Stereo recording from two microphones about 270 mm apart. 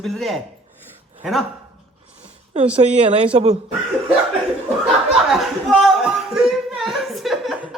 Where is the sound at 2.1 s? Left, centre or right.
Right.